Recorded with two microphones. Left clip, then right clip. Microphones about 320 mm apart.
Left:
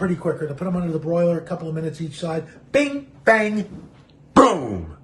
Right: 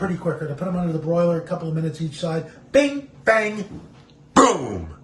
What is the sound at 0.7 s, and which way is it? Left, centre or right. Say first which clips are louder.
A man's voice: even; centre.